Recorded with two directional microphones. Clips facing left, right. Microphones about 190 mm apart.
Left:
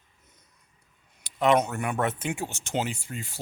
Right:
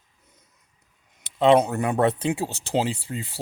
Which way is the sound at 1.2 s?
30° right (ahead or behind).